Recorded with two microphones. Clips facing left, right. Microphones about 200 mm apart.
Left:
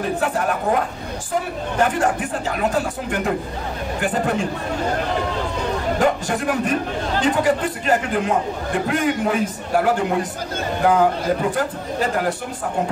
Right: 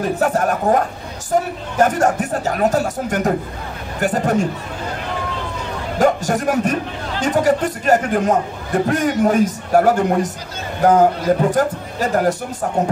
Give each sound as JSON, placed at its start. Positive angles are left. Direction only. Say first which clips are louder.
{"t": 0.2, "sound": "a man's voice", "louder": "right 4 dB", "side_deg": -45}
{"t": 5.9, "sound": "a man's voice", "louder": "right 6 dB", "side_deg": -40}